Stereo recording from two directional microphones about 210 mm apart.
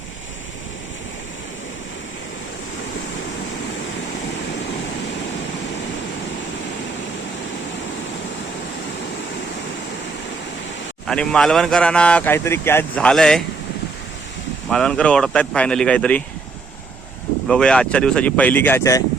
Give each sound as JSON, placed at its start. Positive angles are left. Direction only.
{"t": 11.0, "sound": "speech", "side_deg": 5}
{"t": 14.7, "sound": "speech", "side_deg": 5}
{"t": 17.5, "sound": "speech", "side_deg": 5}